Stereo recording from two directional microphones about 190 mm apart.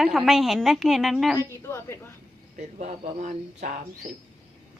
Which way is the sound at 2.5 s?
40° right (ahead or behind).